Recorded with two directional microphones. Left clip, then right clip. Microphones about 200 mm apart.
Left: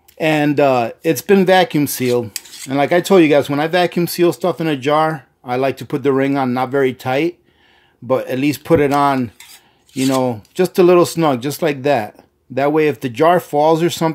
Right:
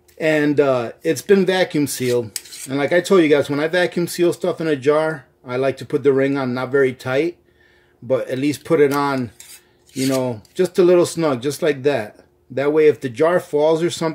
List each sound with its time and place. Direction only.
0.2 s speech: 35° left (ahead or behind)